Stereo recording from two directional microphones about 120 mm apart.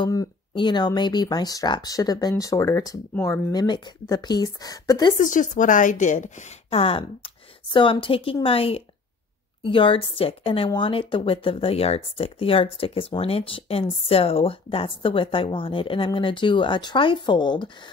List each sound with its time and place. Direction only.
0.6 s speech: 40° left (ahead or behind)
5.1 s speech: 90° left
6.8 s speech: 50° left (ahead or behind)